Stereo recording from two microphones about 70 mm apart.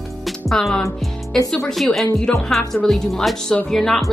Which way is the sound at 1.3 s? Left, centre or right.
Centre.